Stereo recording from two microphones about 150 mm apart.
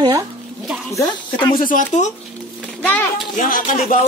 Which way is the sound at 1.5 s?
60° left (ahead or behind).